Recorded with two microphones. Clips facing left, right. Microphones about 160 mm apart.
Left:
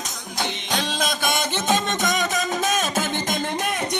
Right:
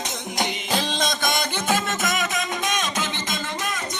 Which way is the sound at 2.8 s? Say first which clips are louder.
Left 3 dB; 50° left (ahead or behind).